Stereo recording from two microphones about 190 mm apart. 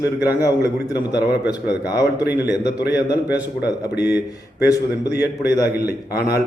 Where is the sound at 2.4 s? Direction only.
60° left (ahead or behind).